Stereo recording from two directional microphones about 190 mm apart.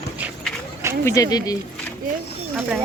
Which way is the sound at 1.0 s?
15° left (ahead or behind).